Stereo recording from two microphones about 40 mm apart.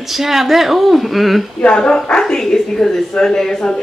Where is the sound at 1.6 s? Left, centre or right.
Left.